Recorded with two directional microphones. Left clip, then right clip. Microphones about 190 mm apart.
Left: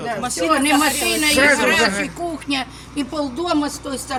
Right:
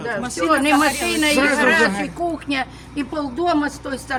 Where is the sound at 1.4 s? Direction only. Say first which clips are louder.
Left 1 dB; 55° right (ahead or behind).